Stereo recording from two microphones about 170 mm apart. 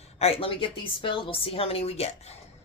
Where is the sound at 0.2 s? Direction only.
35° left (ahead or behind).